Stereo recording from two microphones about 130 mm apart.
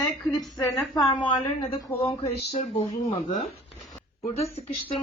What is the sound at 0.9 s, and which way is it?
Speech, 35° left (ahead or behind).